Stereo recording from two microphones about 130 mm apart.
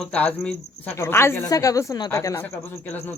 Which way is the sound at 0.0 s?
10° left (ahead or behind).